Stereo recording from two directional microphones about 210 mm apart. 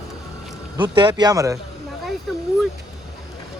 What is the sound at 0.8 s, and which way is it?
Speech, 20° right (ahead or behind).